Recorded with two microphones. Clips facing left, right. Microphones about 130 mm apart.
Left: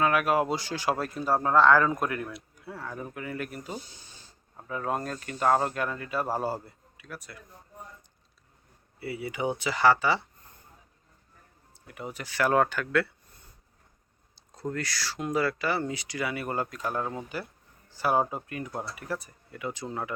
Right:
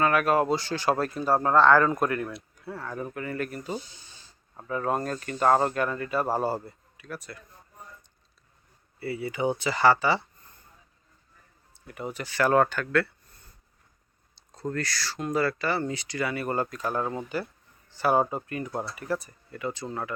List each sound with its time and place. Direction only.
0.0 s speech: 5° left (ahead or behind)
9.0 s speech: 10° left (ahead or behind)
11.7 s speech: centre (ahead or behind)
14.3 s speech: 10° left (ahead or behind)